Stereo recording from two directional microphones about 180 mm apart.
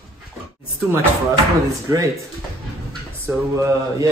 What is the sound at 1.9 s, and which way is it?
Speech, 15° right (ahead or behind).